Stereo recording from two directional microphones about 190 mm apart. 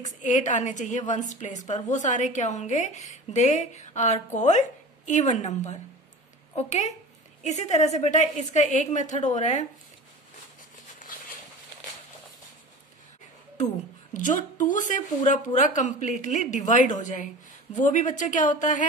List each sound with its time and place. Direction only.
0.0 s a woman's voice: 40° left (ahead or behind)
7.4 s a woman's voice: 35° left (ahead or behind)
14.1 s a woman's voice: 45° left (ahead or behind)